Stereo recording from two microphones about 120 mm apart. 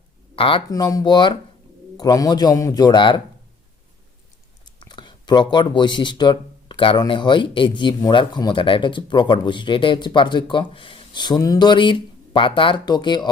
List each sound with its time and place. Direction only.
0.3 s speech: 45° left (ahead or behind)
0.7 s speech: 30° left (ahead or behind)
4.6 s a sound: 40° left (ahead or behind)
7.1 s speech: 40° left (ahead or behind)